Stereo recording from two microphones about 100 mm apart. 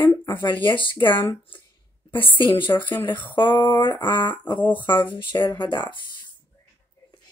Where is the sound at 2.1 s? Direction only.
55° left (ahead or behind).